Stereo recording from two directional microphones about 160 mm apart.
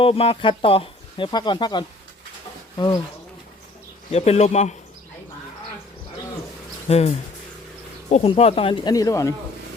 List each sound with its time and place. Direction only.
0.0 s speech: 35° left (ahead or behind)
4.1 s speech: 45° left (ahead or behind)
6.8 s speech: 40° left (ahead or behind); by 9.3 s 20° left (ahead or behind)